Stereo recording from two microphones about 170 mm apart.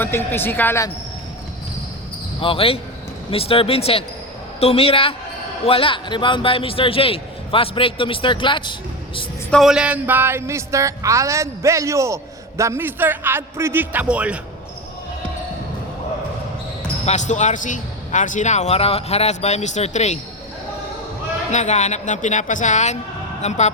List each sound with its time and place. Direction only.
0.0 s speech: 10° left (ahead or behind)
2.4 s a man's voice: 30° left (ahead or behind)
9.5 s speech: centre (ahead or behind)
17.1 s a man's voice: 45° left (ahead or behind)
21.5 s a man's voice: 45° left (ahead or behind)